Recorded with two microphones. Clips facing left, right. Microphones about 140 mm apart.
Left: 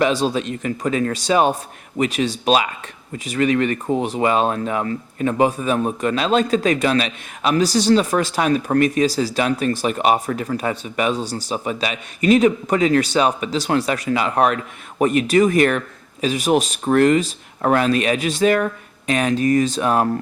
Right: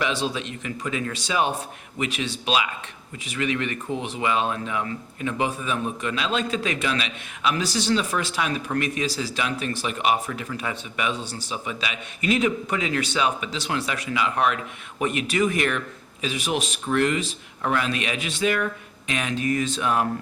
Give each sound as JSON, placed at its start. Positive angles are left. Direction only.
{"t": 0.0, "sound": "speech", "side_deg": 40}